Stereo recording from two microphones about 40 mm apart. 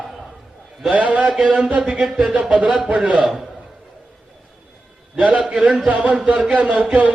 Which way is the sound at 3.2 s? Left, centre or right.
Centre.